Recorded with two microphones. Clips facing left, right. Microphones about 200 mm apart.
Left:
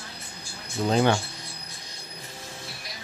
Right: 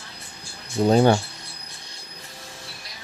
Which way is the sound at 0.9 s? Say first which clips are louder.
Right 5 dB; 40° right (ahead or behind).